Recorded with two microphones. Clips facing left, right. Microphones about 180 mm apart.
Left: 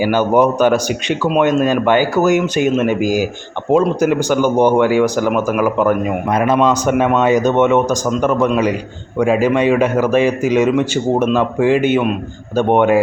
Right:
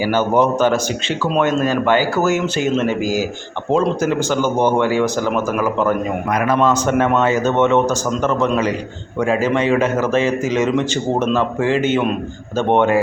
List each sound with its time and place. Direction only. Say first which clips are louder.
0.0 s a man's voice: left 3 dB; 15° left (ahead or behind)
6.2 s a man's voice: left 2 dB; 25° left (ahead or behind)